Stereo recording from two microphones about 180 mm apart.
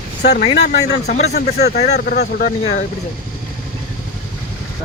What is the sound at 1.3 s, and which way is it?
Speech, 65° left (ahead or behind).